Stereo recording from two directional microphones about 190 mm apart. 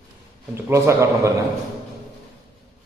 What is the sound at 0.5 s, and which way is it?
Speech, 15° right (ahead or behind).